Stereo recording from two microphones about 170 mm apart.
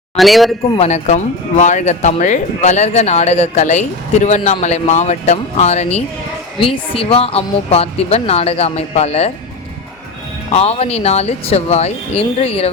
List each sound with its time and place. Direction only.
0.2 s a man's voice: centre (ahead or behind)
0.8 s speech: 40° left (ahead or behind)
10.5 s speech: 35° left (ahead or behind)